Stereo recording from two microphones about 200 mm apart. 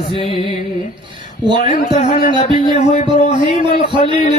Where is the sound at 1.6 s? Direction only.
35° left (ahead or behind).